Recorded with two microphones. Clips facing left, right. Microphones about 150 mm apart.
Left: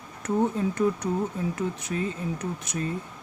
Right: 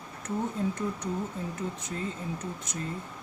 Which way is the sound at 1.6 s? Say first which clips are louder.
Left 5 dB; 75° left (ahead or behind).